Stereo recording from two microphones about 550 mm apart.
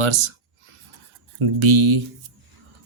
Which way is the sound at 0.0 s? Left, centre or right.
Right.